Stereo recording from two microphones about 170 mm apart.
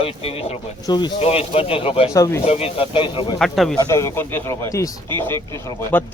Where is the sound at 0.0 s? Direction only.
35° left (ahead or behind).